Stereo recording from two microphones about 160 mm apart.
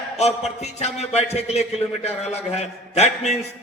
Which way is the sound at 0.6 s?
45° left (ahead or behind).